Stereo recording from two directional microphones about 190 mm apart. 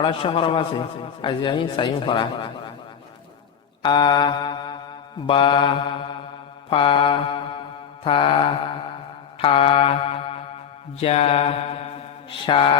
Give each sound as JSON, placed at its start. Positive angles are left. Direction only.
{"t": 0.0, "sound": "a man's voice", "side_deg": 25}
{"t": 3.8, "sound": "mantra", "side_deg": 25}
{"t": 5.2, "sound": "a man's voice", "side_deg": 25}
{"t": 6.7, "sound": "mantra", "side_deg": 25}
{"t": 8.0, "sound": "a man's voice", "side_deg": 25}
{"t": 9.4, "sound": "mantra", "side_deg": 30}
{"t": 12.3, "sound": "a man's voice", "side_deg": 25}